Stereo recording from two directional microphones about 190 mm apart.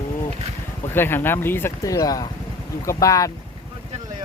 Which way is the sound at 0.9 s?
10° left (ahead or behind).